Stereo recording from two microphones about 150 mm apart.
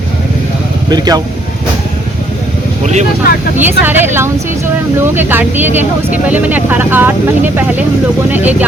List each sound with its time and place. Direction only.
0.9 s speech: 25° right (ahead or behind)
2.8 s speech: 50° right (ahead or behind)
3.6 s speech: 15° right (ahead or behind)